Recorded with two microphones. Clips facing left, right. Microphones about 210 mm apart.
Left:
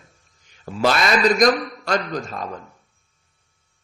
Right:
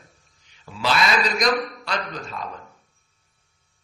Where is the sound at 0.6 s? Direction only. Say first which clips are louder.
Left 3 dB; 45° left (ahead or behind).